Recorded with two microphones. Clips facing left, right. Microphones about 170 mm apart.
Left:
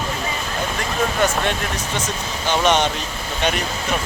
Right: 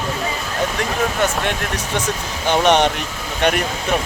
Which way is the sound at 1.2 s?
Centre (ahead or behind).